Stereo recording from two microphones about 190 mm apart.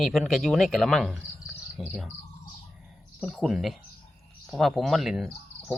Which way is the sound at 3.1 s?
Centre (ahead or behind).